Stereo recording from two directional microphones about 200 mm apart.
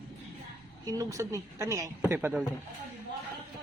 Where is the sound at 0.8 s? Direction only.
15° right (ahead or behind).